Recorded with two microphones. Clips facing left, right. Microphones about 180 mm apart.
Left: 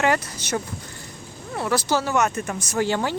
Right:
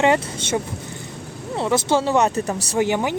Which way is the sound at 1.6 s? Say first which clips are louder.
Right 3 dB; 25° right (ahead or behind).